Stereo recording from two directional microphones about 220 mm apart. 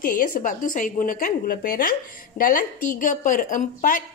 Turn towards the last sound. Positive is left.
turn(degrees=40)  # may be behind; listen again after turning